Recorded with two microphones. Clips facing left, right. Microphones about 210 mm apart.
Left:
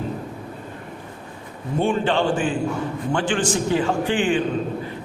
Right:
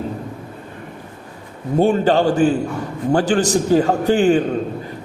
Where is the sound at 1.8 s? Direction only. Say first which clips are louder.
Right 6 dB; 40° right (ahead or behind).